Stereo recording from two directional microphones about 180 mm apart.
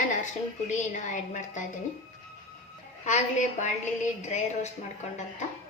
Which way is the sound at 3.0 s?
45° left (ahead or behind).